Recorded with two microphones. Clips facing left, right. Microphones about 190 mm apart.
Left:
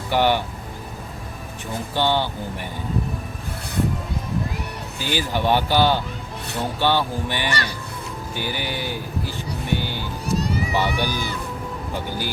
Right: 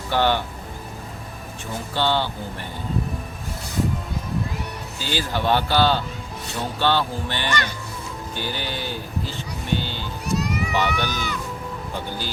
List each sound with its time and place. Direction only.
0.1 s speech: 15° left (ahead or behind)
1.7 s speech: 15° left (ahead or behind)
4.9 s speech: 15° left (ahead or behind)
10.3 s run: 30° left (ahead or behind)
10.7 s speech: 10° left (ahead or behind)